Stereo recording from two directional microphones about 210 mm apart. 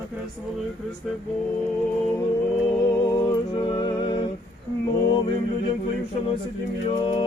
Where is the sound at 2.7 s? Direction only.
20° left (ahead or behind).